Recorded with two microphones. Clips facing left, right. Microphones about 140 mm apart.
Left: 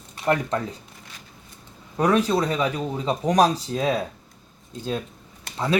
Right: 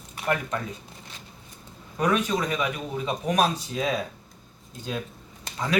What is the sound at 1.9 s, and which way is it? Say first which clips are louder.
Speech: left 4 dB; 35° left (ahead or behind).